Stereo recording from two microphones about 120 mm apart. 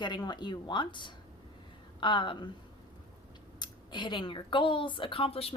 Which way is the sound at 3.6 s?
40° left (ahead or behind).